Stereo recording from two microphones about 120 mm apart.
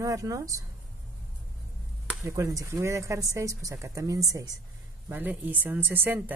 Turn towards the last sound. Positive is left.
turn(degrees=-15)  # may be behind; listen again after turning